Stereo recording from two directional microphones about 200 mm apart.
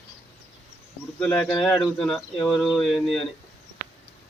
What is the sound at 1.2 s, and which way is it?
Speech, 5° left (ahead or behind).